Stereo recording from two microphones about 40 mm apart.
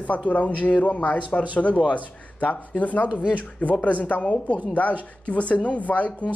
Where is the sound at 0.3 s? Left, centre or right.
Left.